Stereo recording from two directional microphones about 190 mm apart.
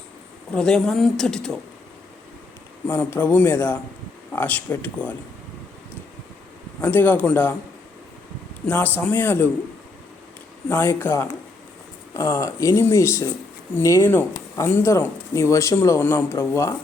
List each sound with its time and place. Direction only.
0.5 s speech: 5° left (ahead or behind)
2.8 s speech: 10° left (ahead or behind)
6.8 s speech: 10° left (ahead or behind)
8.6 s speech: 10° left (ahead or behind)
10.7 s speech: 10° left (ahead or behind)